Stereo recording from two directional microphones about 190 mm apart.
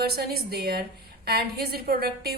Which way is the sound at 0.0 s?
55° right (ahead or behind).